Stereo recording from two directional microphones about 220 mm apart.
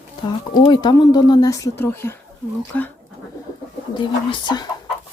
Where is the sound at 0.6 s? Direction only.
20° left (ahead or behind).